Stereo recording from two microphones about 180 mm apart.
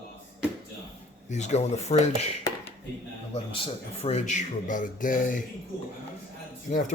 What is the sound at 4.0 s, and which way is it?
Speech, 40° left (ahead or behind).